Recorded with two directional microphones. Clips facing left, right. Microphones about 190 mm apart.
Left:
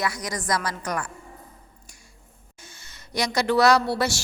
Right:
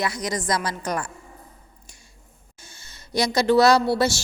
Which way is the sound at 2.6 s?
30° right (ahead or behind).